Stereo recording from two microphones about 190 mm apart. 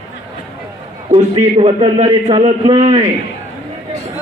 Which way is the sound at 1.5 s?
30° right (ahead or behind).